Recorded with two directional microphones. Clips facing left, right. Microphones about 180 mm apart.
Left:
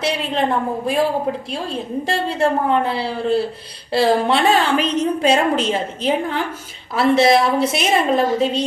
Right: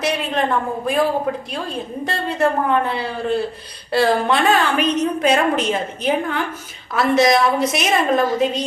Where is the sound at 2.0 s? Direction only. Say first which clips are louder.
Even; 30° left (ahead or behind).